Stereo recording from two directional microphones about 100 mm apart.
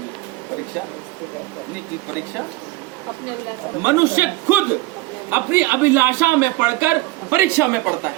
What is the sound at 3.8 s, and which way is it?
A man's voice, 20° right (ahead or behind).